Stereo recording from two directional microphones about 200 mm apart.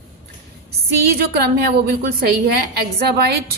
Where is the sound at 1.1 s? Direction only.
50° right (ahead or behind).